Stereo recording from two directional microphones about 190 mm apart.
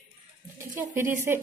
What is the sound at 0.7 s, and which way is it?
Speech, 15° right (ahead or behind).